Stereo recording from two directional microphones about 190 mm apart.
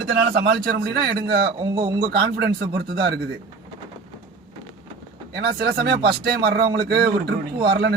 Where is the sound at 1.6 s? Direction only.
20° right (ahead or behind).